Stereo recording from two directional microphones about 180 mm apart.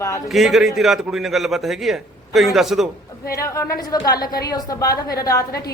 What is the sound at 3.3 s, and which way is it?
A woman's voice, 15° left (ahead or behind).